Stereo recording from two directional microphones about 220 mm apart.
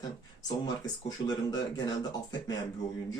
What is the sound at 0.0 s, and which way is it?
Speech, 15° left (ahead or behind).